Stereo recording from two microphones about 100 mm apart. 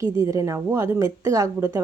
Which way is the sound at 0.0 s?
30° right (ahead or behind).